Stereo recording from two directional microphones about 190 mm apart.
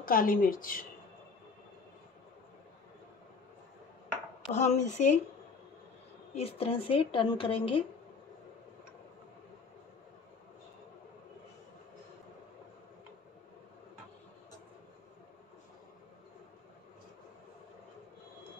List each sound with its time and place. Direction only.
0.0 s a woman's voice: 50° left (ahead or behind)
4.5 s speech: 35° left (ahead or behind)
6.3 s a woman's voice: 30° left (ahead or behind)